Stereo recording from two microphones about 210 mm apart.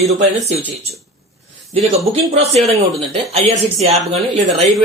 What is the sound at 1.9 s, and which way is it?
Speech, 30° right (ahead or behind).